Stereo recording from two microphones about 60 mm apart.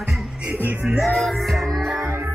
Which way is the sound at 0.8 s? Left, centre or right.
Centre.